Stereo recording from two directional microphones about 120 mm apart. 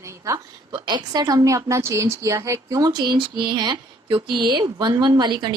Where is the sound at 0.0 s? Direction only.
25° right (ahead or behind).